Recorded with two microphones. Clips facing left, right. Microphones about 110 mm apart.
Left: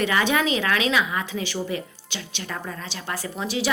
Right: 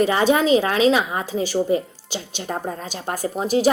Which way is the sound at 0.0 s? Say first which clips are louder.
Right 5 dB; 35° right (ahead or behind).